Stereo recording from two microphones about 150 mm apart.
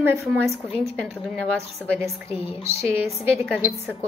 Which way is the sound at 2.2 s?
40° left (ahead or behind).